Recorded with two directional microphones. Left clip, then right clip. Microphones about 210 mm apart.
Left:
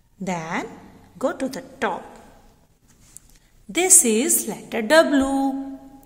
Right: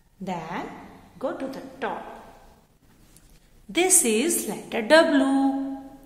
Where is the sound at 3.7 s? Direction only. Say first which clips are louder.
Left 3 dB; 30° left (ahead or behind).